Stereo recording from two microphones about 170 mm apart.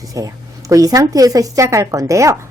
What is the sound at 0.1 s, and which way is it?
A woman's voice, 20° right (ahead or behind).